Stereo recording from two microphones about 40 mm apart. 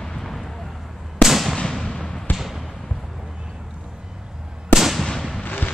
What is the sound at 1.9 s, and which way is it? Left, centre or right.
Basketball bounce, centre.